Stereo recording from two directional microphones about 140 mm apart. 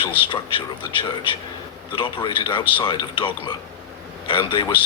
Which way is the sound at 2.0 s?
35° left (ahead or behind).